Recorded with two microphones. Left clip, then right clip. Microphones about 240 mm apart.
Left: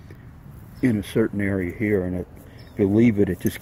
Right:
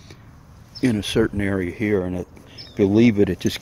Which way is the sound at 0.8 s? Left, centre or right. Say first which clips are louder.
Right 2 dB; centre.